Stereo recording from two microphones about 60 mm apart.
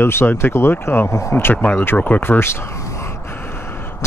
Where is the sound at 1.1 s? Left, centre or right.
Left.